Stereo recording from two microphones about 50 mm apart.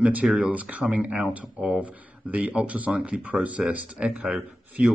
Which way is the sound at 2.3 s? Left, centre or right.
Right.